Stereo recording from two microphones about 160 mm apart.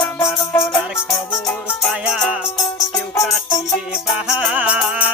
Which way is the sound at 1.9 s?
5° right (ahead or behind).